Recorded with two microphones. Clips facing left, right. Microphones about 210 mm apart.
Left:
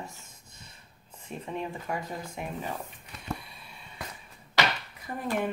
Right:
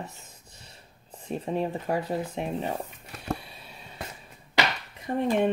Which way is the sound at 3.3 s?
35° right (ahead or behind).